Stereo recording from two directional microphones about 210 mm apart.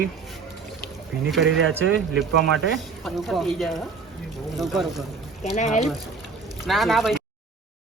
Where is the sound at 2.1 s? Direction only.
Centre (ahead or behind).